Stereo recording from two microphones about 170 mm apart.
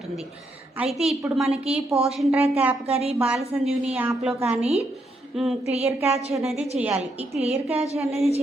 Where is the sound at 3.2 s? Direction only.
5° right (ahead or behind).